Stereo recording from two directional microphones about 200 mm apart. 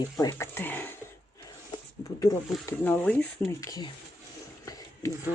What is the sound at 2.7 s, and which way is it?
Speech, 10° left (ahead or behind).